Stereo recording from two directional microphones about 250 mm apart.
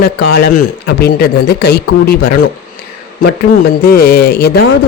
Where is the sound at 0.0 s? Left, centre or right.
Left.